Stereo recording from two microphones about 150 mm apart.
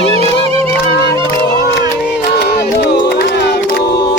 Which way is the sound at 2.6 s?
90° left.